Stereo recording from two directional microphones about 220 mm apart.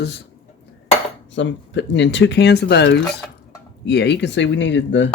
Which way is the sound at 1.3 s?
55° left (ahead or behind).